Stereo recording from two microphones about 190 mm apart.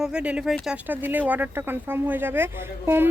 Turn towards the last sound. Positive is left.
turn(degrees=-10)  # may be behind; listen again after turning